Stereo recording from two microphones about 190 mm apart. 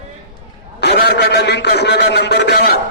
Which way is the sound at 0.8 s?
60° left (ahead or behind).